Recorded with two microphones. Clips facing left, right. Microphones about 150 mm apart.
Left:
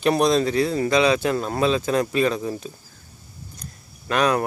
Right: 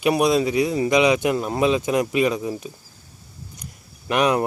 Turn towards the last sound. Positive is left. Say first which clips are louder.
# right 1 dB
turn(degrees=-20)  # may be behind; listen again after turning